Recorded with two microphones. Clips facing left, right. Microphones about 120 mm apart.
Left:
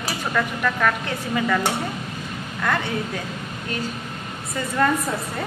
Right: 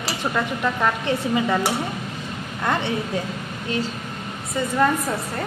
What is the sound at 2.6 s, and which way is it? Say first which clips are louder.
Speech: right 1 dB; 25° right (ahead or behind).